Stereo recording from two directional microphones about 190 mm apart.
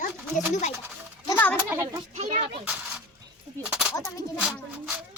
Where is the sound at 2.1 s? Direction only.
35° right (ahead or behind).